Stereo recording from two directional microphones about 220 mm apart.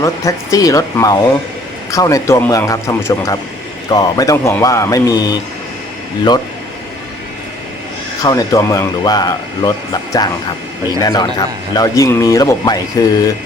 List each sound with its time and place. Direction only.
0.0 s speech: 15° left (ahead or behind)
8.2 s speech: 15° left (ahead or behind)